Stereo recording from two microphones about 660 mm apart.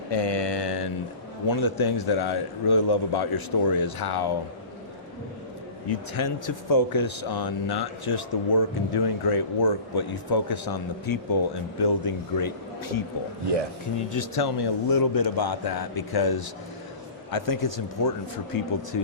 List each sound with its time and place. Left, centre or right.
0.1 s mantra: left
1.5 s speech: left
5.9 s speech: left
14.1 s speech: left